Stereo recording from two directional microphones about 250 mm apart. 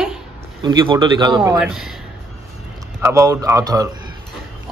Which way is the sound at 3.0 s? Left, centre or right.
Centre.